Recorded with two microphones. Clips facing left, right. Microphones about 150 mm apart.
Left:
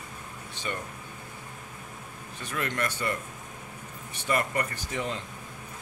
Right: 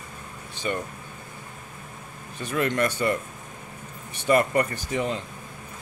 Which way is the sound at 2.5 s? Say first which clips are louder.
Right 7 dB; 25° right (ahead or behind).